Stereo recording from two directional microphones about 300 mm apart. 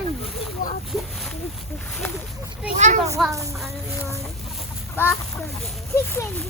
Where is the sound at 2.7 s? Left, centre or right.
Right.